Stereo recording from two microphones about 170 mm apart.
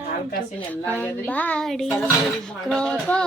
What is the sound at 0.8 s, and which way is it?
A child's voice, 10° left (ahead or behind).